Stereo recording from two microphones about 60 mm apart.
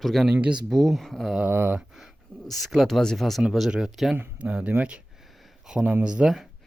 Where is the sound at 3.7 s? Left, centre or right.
Centre.